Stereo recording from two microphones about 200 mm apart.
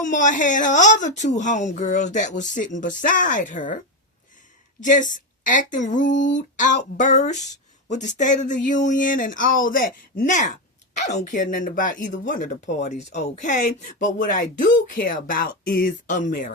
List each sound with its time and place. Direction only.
0.0 s speech: 40° left (ahead or behind)
4.8 s speech: 40° left (ahead or behind)